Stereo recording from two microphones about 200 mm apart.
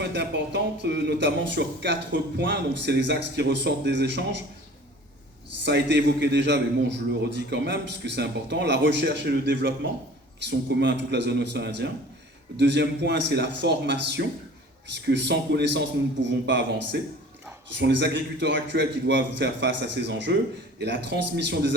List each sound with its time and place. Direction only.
0.0 s a man's voice: 60° right (ahead or behind)
5.6 s a man's voice: 60° right (ahead or behind)